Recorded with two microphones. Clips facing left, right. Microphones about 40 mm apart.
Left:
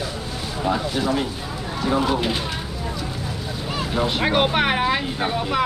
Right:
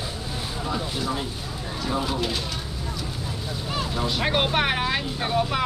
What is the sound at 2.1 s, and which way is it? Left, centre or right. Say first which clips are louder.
Speech: left 5 dB; left.